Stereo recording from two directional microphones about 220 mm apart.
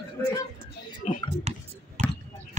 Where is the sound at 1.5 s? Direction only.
30° right (ahead or behind).